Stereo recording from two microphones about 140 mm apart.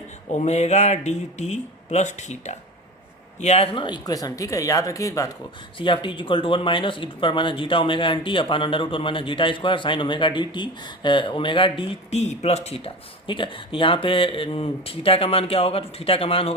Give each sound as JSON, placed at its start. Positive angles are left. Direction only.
{"t": 0.3, "sound": "speech", "side_deg": 55}
{"t": 5.7, "sound": "speech", "side_deg": 35}